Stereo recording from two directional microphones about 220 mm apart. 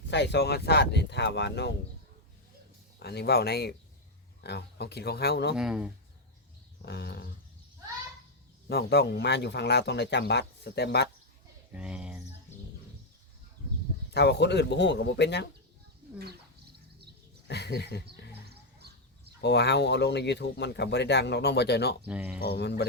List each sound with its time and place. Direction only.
0.1 s speech: 50° left (ahead or behind)
3.0 s speech: 45° left (ahead or behind)
5.5 s speech: 5° right (ahead or behind)
6.8 s speech: 50° left (ahead or behind)
8.7 s speech: 50° left (ahead or behind)
11.7 s a sound: 5° right (ahead or behind)
14.1 s speech: 50° left (ahead or behind)
17.5 s speech: 50° left (ahead or behind)
18.4 s a sound: 45° right (ahead or behind)
19.4 s speech: 50° left (ahead or behind)
22.0 s speech: 5° right (ahead or behind)
22.4 s speech: 50° left (ahead or behind)